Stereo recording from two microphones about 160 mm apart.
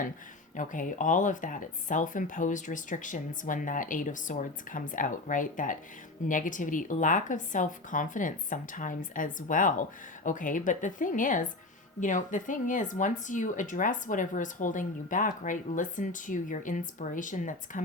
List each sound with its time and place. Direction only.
0.5 s speech: 55° left (ahead or behind)